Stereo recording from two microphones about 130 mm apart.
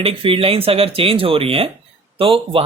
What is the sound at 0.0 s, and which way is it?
Speech, 45° right (ahead or behind).